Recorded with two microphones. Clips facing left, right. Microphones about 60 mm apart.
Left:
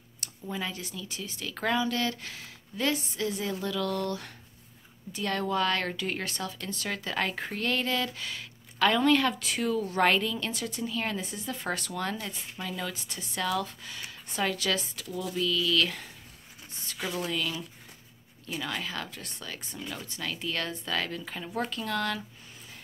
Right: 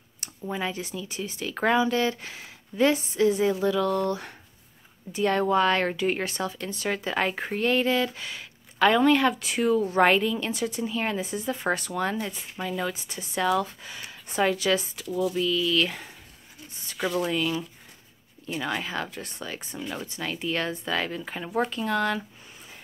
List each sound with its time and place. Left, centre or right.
0.2 s a woman's voice: right
17.2 s speech: centre